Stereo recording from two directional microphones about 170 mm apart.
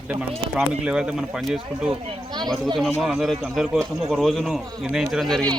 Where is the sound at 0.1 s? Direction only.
5° right (ahead or behind).